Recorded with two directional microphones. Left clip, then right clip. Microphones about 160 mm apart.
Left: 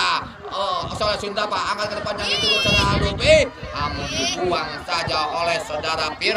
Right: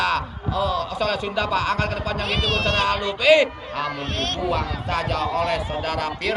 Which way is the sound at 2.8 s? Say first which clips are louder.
Even; 30° right (ahead or behind).